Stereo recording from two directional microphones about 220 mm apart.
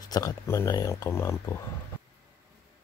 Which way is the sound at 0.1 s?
15° left (ahead or behind).